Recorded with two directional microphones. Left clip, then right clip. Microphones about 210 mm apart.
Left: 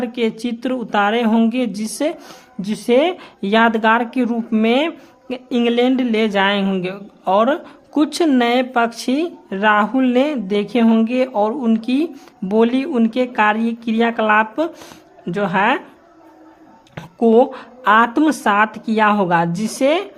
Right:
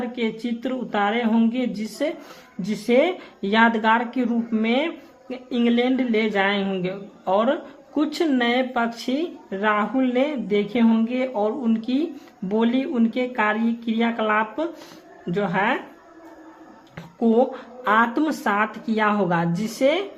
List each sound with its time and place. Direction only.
0.0 s speech: 40° left (ahead or behind)
16.9 s speech: 40° left (ahead or behind)